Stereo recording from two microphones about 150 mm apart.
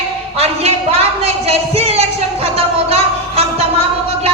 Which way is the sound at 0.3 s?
45° right (ahead or behind).